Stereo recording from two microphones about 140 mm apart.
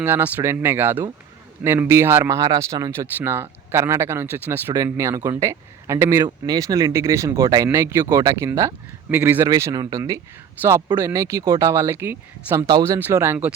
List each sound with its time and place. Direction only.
0.0 s speech: 15° right (ahead or behind)
6.2 s speech: 30° right (ahead or behind)